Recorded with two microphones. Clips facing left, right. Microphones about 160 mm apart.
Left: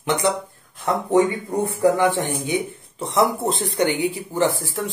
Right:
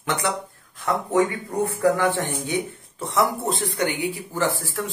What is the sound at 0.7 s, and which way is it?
Speech, 25° left (ahead or behind).